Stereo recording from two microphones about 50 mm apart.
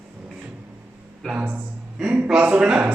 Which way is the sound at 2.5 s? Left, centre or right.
Centre.